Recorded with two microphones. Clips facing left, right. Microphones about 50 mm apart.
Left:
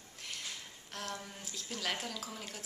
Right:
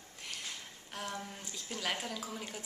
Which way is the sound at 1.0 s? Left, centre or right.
Centre.